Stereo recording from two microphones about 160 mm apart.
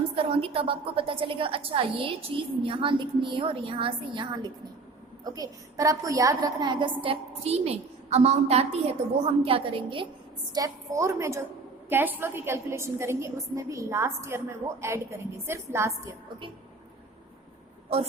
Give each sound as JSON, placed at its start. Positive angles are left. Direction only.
{"t": 0.2, "sound": "a woman's voice", "side_deg": -35}
{"t": 10.5, "sound": "a woman's voice", "side_deg": -20}